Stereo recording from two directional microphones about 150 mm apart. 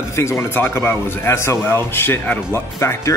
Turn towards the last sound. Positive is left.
turn(degrees=15)  # may be behind; listen again after turning